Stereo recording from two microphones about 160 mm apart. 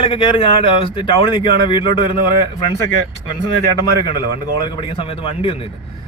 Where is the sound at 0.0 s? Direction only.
35° left (ahead or behind).